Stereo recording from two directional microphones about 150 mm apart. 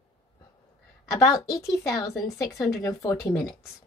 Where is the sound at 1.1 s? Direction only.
25° left (ahead or behind).